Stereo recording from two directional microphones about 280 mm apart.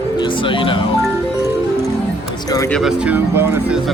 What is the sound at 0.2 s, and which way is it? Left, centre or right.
Speech, centre.